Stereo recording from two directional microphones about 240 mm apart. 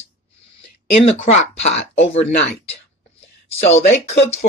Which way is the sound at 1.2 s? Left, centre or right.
Left.